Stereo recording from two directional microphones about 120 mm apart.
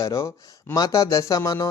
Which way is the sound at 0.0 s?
30° left (ahead or behind).